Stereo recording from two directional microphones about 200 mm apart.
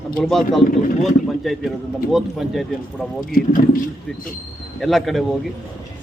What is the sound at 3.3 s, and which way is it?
Speech, 45° left (ahead or behind).